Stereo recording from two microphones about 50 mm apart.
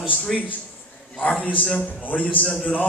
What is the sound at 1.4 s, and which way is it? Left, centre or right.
Speech, left.